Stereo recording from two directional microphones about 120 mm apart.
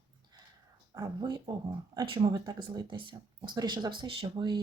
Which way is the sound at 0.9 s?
35° right (ahead or behind).